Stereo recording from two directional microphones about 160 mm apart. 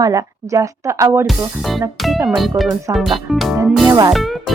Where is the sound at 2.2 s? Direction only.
Centre (ahead or behind).